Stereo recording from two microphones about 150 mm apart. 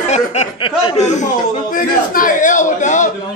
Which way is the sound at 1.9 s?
65° left (ahead or behind).